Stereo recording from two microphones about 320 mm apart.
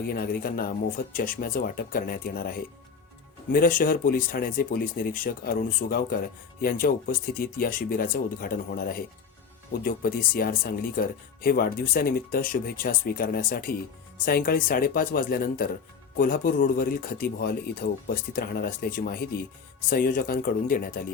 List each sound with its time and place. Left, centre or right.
0.1 s speech: left